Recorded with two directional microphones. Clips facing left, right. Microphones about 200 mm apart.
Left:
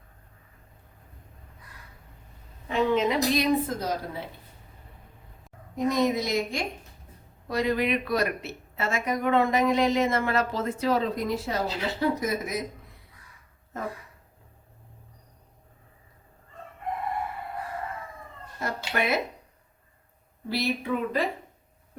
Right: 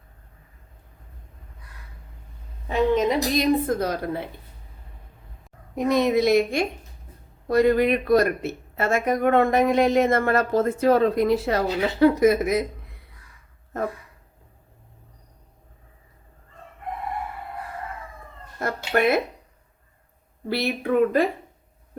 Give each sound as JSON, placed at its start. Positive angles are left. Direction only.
{"t": 2.9, "sound": "a woman's voice", "side_deg": -50}
{"t": 5.7, "sound": "a woman's voice", "side_deg": -65}
{"t": 7.4, "sound": "speech", "side_deg": -50}
{"t": 18.6, "sound": "a woman's voice", "side_deg": -55}
{"t": 20.5, "sound": "a woman's voice", "side_deg": -60}